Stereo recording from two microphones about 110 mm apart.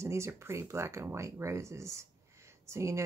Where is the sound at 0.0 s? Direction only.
25° right (ahead or behind).